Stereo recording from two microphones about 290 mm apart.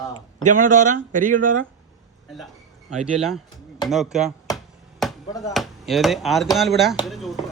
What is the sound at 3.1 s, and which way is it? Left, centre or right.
Speech, centre.